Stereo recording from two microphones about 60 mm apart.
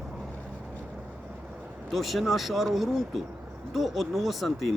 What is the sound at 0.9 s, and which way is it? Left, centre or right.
Vehicle, right.